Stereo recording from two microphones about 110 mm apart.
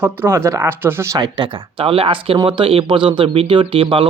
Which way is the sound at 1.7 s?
60° right (ahead or behind).